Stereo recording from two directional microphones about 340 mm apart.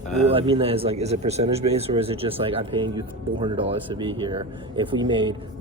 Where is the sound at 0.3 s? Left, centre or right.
Centre.